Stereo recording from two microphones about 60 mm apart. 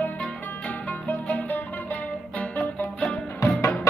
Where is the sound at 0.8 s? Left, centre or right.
Left.